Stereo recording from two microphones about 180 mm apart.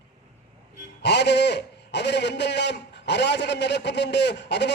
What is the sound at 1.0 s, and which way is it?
A man's voice, 70° left (ahead or behind).